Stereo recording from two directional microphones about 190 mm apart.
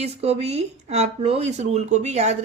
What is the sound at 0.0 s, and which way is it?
Speech, 35° right (ahead or behind).